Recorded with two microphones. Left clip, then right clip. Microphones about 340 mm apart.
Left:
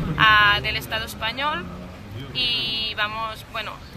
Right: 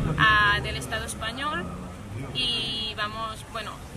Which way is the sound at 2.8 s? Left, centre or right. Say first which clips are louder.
Left 5 dB; centre.